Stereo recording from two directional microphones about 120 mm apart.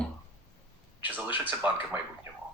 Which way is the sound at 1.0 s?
15° right (ahead or behind).